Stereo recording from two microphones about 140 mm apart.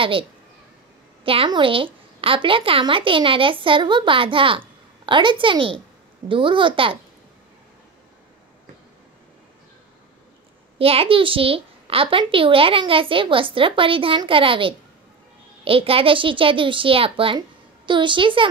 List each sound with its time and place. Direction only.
0.0 s a woman's voice: 40° right (ahead or behind)
10.8 s a woman's voice: 45° right (ahead or behind)